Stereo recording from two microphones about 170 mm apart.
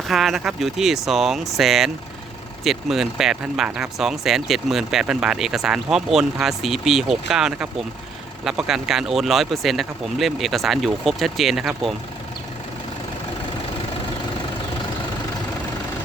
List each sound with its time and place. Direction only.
0.1 s speech: centre (ahead or behind)